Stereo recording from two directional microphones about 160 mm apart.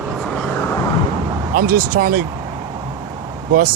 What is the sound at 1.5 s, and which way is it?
Speech, 65° right (ahead or behind).